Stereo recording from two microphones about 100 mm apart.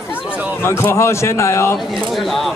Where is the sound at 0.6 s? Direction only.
25° left (ahead or behind).